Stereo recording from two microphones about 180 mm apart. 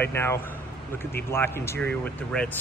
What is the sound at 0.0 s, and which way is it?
Speech, 10° left (ahead or behind).